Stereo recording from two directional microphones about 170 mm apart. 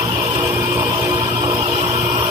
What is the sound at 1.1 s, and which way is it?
Vehicle, 25° right (ahead or behind).